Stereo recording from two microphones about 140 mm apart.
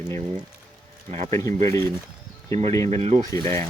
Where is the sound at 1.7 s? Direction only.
20° left (ahead or behind).